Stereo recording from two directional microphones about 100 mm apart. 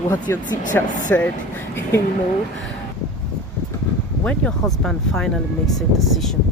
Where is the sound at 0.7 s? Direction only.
20° left (ahead or behind).